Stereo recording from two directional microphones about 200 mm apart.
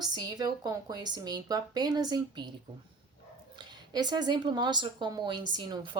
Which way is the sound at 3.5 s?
20° right (ahead or behind).